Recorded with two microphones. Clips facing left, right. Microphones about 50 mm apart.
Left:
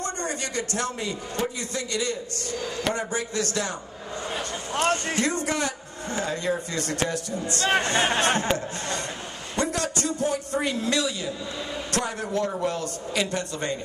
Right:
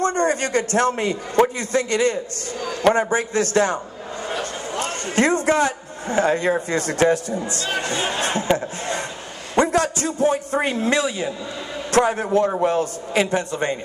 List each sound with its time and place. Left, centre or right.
0.0 s a man's voice: right
5.1 s speech: right
7.4 s speech: left
8.5 s a man's voice: right